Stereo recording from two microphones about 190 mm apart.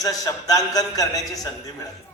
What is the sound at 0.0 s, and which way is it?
A man's voice, 20° left (ahead or behind).